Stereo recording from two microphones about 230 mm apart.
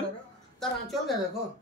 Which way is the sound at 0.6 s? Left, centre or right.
Centre.